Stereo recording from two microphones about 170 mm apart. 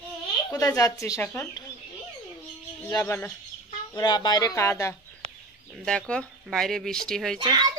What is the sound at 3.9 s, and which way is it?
Speech, 25° left (ahead or behind).